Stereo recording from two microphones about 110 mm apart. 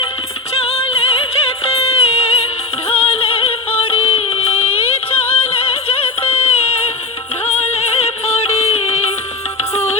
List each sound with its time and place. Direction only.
0.6 s music: 65° left (ahead or behind)